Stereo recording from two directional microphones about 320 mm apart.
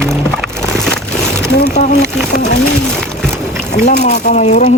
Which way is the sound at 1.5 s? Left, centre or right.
Left.